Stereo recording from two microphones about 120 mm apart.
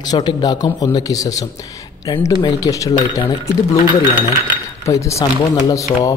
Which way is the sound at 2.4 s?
30° left (ahead or behind).